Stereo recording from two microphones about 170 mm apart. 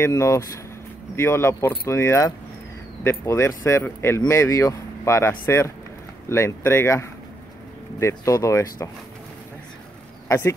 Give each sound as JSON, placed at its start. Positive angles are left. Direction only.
{"t": 0.0, "sound": "speech", "side_deg": 15}
{"t": 10.2, "sound": "speech", "side_deg": 15}